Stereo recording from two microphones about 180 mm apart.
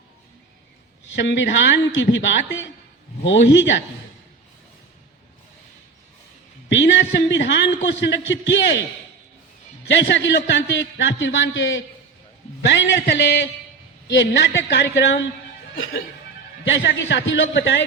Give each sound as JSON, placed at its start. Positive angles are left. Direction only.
{"t": 1.1, "sound": "a woman's voice", "side_deg": 85}
{"t": 6.7, "sound": "a woman's voice", "side_deg": 90}
{"t": 9.9, "sound": "a man's voice", "side_deg": 80}
{"t": 12.6, "sound": "a woman's voice", "side_deg": 75}
{"t": 15.7, "sound": "speech", "side_deg": 55}
{"t": 16.6, "sound": "a woman's voice", "side_deg": 90}